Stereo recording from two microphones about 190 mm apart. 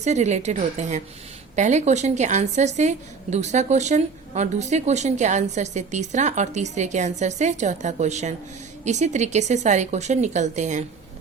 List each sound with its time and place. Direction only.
0.0 s a woman's voice: 35° right (ahead or behind)